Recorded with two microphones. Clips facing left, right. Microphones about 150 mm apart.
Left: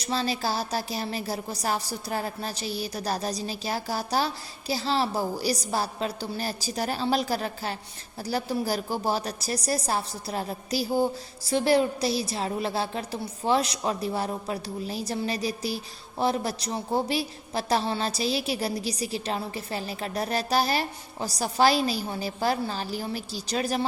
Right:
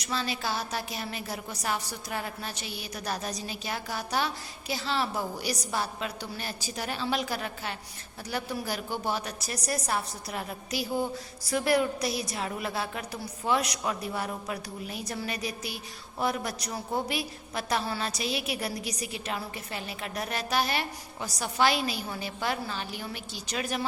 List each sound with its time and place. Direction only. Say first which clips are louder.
0.0 s a woman's voice: left 4 dB; 35° left (ahead or behind)